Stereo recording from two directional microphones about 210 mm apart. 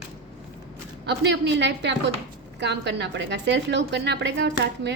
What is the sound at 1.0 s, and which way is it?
A woman's voice, 55° right (ahead or behind).